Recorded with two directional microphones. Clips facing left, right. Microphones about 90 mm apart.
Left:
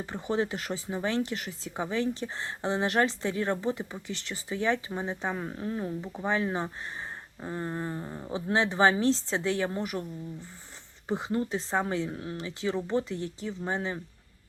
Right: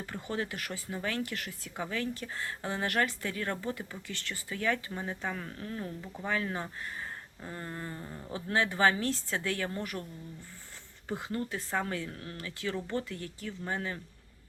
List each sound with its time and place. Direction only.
0.0 s speech: 20° left (ahead or behind)